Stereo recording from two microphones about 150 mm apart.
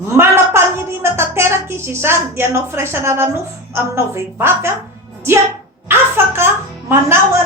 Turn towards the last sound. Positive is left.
turn(degrees=-15)  # may be behind; listen again after turning